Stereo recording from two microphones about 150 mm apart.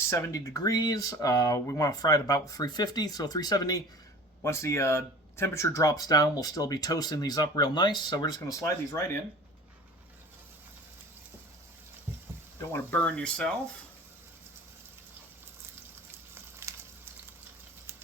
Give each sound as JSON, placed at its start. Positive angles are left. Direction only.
{"t": 0.1, "sound": "speech", "side_deg": 20}
{"t": 12.7, "sound": "speech", "side_deg": 10}
{"t": 16.3, "sound": "a sound", "side_deg": -15}